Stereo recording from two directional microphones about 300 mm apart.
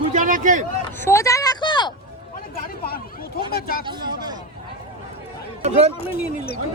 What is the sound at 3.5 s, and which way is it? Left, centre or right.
Speech, left.